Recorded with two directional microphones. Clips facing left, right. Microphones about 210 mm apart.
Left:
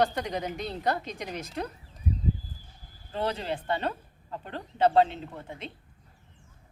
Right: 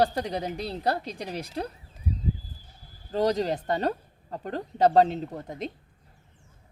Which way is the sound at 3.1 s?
40° right (ahead or behind).